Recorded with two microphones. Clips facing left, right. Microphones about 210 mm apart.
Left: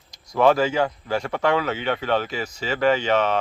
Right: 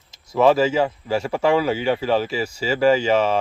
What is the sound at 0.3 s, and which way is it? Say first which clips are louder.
Speech: right 2 dB; 5° right (ahead or behind).